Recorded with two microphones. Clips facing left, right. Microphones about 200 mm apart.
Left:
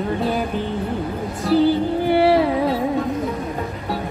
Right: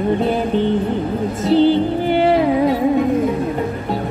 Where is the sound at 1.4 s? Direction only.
25° right (ahead or behind).